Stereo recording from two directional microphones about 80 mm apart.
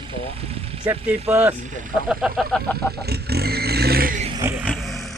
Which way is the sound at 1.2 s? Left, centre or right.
Right.